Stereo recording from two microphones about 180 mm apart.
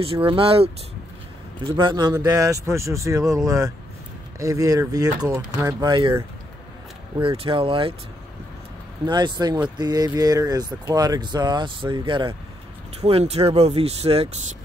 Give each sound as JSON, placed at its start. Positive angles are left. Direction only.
{"t": 0.0, "sound": "speech", "side_deg": -30}
{"t": 1.8, "sound": "speech", "side_deg": -25}
{"t": 7.2, "sound": "speech", "side_deg": -30}
{"t": 9.0, "sound": "speech", "side_deg": -25}